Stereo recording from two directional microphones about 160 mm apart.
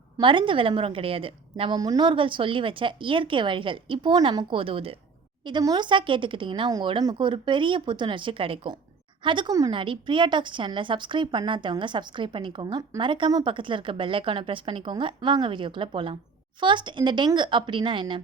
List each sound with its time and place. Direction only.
0.2 s a woman's voice: 30° right (ahead or behind)